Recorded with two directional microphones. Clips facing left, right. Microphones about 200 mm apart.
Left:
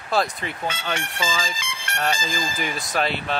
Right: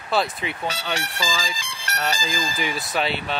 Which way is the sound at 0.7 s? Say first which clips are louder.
Left 1 dB; 35° right (ahead or behind).